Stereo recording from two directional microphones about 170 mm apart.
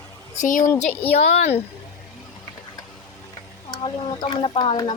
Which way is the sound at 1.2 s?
40° left (ahead or behind).